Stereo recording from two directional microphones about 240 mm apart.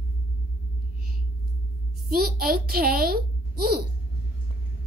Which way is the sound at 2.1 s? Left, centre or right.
Right.